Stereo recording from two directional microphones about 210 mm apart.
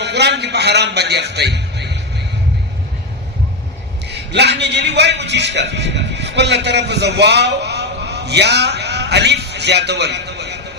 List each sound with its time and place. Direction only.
0.0 s a man's voice: 55° right (ahead or behind)
4.1 s a man's voice: 55° right (ahead or behind)